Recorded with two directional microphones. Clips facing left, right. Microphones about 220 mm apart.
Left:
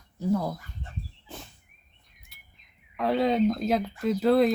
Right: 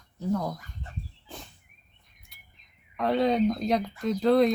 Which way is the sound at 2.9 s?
Centre (ahead or behind).